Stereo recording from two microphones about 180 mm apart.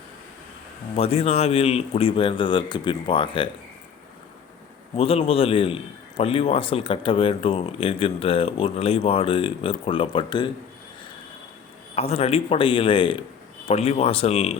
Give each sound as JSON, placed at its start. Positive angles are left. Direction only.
{"t": 0.9, "sound": "a man's voice", "side_deg": 35}
{"t": 4.9, "sound": "a man's voice", "side_deg": 35}
{"t": 11.9, "sound": "a man's voice", "side_deg": 35}